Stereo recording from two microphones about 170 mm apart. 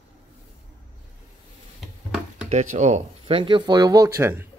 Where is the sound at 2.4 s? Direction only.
45° right (ahead or behind).